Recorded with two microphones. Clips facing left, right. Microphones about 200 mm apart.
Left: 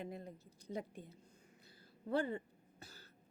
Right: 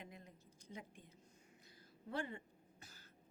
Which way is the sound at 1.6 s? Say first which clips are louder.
Left 6 dB; 30° left (ahead or behind).